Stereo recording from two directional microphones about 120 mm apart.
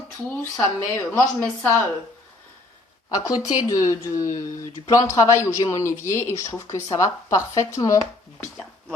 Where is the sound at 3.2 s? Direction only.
30° left (ahead or behind).